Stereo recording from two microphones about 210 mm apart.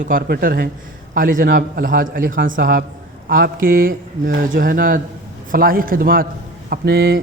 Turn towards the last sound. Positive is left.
turn(degrees=-50)  # may be behind; listen again after turning